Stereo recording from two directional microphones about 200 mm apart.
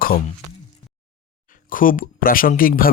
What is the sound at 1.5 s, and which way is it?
Speech, 45° left (ahead or behind).